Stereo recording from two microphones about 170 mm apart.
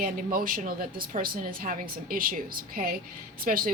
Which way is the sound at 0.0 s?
55° right (ahead or behind).